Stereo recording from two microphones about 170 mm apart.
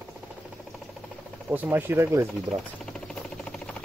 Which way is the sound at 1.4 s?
10° right (ahead or behind).